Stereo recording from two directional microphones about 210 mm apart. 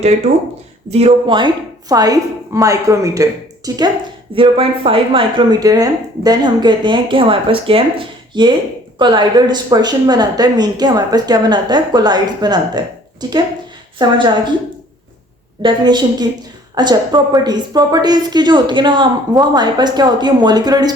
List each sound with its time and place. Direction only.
0.9 s a woman's voice: 30° right (ahead or behind)
15.6 s speech: 20° right (ahead or behind)